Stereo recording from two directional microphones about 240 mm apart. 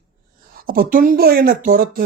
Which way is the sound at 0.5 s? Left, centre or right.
Right.